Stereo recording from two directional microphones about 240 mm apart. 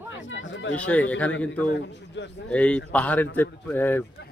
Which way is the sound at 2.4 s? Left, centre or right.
Centre.